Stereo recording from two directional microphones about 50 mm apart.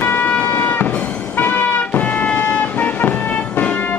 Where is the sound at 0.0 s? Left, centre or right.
Left.